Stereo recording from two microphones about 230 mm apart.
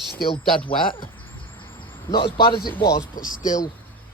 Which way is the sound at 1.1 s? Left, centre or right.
Centre.